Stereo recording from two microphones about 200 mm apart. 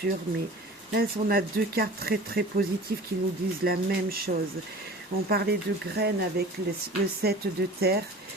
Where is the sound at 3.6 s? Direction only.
50° right (ahead or behind).